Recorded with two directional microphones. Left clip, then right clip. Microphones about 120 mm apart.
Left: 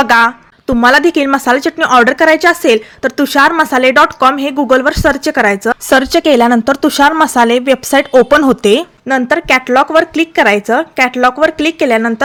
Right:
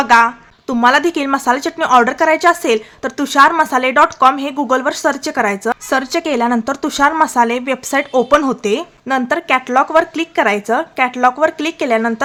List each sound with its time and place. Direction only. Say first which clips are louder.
0.0 s a woman's voice: left 2 dB; 40° left (ahead or behind)
5.9 s a woman's voice: left 10 dB; 45° left (ahead or behind)
9.0 s a woman's voice: left 4 dB; 25° left (ahead or behind)